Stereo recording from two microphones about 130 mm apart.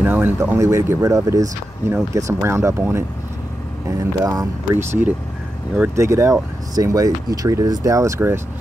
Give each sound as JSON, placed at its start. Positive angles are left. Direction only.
{"t": 0.0, "sound": "speech", "side_deg": -15}
{"t": 4.2, "sound": "speech", "side_deg": -25}